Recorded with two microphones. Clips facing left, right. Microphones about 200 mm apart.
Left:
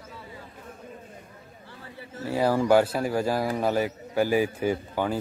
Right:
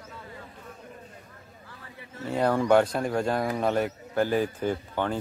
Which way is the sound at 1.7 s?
30° left (ahead or behind).